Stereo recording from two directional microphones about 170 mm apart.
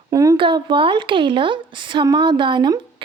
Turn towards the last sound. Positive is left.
turn(degrees=-25)  # may be behind; listen again after turning